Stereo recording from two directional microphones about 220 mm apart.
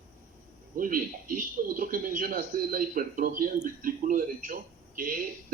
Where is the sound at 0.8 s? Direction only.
40° right (ahead or behind).